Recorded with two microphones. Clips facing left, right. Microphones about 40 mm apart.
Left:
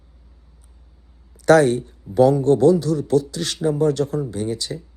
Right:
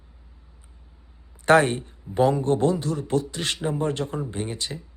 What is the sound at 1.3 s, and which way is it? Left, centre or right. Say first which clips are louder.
A man's voice: left 4 dB; right.